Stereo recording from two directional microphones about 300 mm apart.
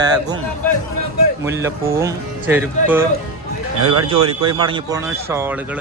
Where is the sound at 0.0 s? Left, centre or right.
Centre.